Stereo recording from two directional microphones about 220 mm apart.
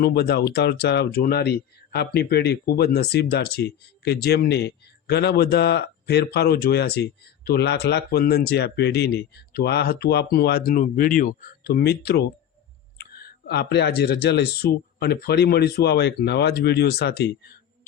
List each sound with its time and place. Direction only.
0.0 s speech: 45° left (ahead or behind)